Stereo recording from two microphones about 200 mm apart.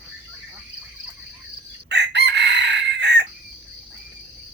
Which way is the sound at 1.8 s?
60° right (ahead or behind).